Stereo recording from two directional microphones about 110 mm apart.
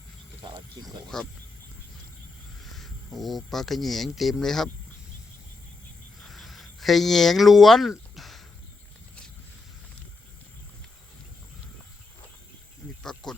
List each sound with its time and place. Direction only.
0.8 s speech: 5° left (ahead or behind)
2.6 s speech: centre (ahead or behind)
6.2 s a sound: centre (ahead or behind)
13.0 s cricket: 5° left (ahead or behind)